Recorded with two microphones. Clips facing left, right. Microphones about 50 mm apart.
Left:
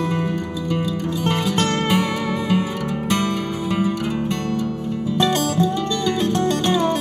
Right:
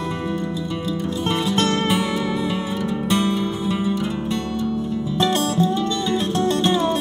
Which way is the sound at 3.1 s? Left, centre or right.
Left.